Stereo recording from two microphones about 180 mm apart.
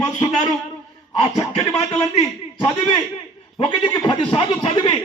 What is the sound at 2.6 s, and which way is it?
Speech, 25° left (ahead or behind).